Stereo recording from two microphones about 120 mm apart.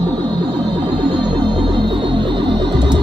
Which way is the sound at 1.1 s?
40° right (ahead or behind).